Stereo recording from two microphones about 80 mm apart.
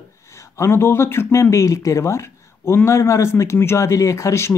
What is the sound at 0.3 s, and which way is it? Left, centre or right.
Speech, left.